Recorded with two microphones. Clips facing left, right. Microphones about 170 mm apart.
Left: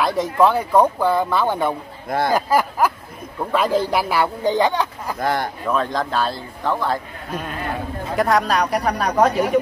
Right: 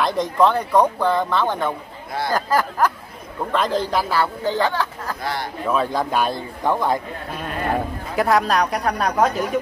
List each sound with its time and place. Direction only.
0.0 s speech: 5° left (ahead or behind)
2.0 s speech: 50° left (ahead or behind)
2.3 s speech: 10° left (ahead or behind)
5.2 s speech: 50° left (ahead or behind)
5.7 s speech: 5° right (ahead or behind)
8.2 s speech: centre (ahead or behind)